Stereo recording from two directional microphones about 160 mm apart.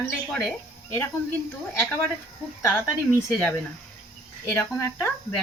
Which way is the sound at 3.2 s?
15° left (ahead or behind).